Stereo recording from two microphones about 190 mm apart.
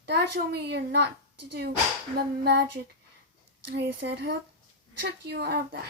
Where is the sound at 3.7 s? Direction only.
60° right (ahead or behind).